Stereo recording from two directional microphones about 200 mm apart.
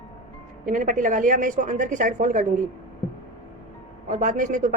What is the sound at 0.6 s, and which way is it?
A woman's voice, 40° right (ahead or behind).